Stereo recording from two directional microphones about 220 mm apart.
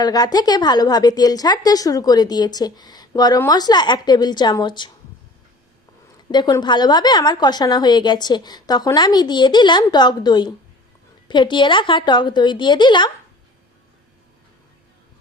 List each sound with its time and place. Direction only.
0.0 s a woman's voice: 15° left (ahead or behind)
6.3 s a woman's voice: 20° left (ahead or behind)